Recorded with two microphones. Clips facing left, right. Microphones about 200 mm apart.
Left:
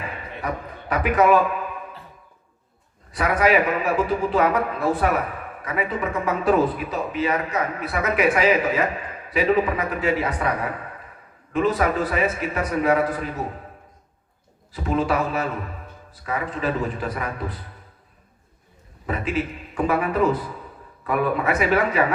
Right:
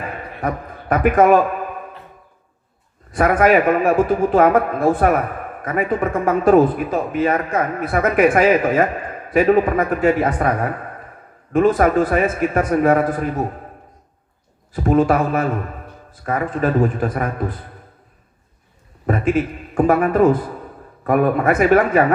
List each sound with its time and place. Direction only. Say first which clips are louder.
0.0 s a sound: right 6 dB; 50° right (ahead or behind)
3.1 s a man's voice: right 5 dB; 50° right (ahead or behind)
14.7 s a man's voice: right 7 dB; 50° right (ahead or behind)
19.0 s a man's voice: right 7 dB; 50° right (ahead or behind)